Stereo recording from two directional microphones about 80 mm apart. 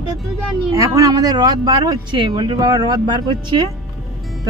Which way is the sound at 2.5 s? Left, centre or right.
Right.